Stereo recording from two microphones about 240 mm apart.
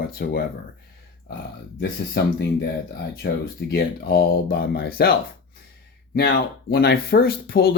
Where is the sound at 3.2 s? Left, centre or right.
Left.